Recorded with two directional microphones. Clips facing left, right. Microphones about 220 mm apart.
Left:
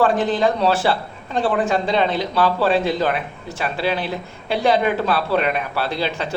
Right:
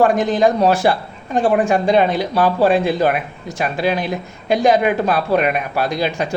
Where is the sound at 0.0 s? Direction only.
15° right (ahead or behind).